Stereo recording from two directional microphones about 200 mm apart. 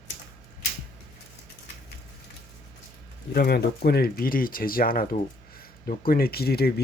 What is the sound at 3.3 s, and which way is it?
Speech, 50° left (ahead or behind).